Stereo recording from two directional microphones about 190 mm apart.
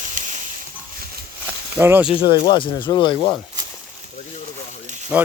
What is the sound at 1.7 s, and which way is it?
Speech, 10° right (ahead or behind).